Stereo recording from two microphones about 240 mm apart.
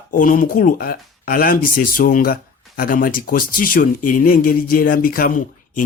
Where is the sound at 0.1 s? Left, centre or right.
Left.